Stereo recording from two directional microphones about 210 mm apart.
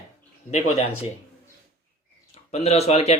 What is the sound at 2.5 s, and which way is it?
Speech, 30° left (ahead or behind).